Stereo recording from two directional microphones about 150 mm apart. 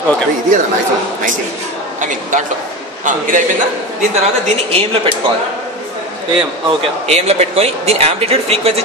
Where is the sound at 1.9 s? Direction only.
60° right (ahead or behind).